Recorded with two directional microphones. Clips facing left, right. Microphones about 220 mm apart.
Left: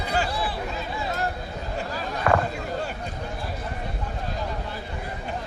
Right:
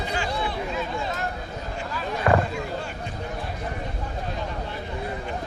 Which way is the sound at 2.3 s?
20° right (ahead or behind).